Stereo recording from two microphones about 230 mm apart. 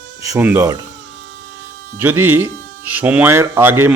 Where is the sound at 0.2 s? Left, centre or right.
Centre.